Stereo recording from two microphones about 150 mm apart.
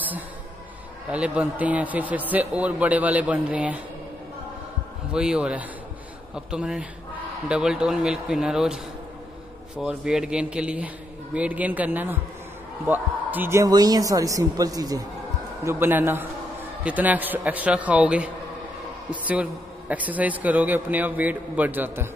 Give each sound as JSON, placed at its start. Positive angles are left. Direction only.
{"t": 1.1, "sound": "a man's voice", "side_deg": -10}
{"t": 5.1, "sound": "a man's voice", "side_deg": -5}